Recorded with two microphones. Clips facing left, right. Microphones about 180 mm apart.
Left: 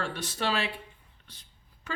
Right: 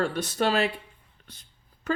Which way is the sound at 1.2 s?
45° right (ahead or behind).